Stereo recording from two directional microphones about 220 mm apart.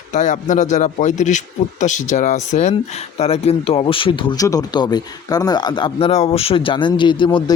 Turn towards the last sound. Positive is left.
turn(degrees=20)  # may be behind; listen again after turning